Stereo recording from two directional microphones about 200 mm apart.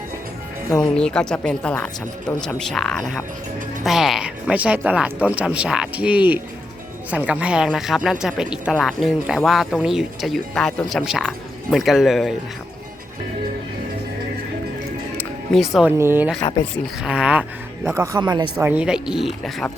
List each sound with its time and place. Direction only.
0.7 s speech: 5° left (ahead or behind)
15.2 s music: centre (ahead or behind)
16.0 s speech: 10° right (ahead or behind)
18.5 s speech: 5° right (ahead or behind)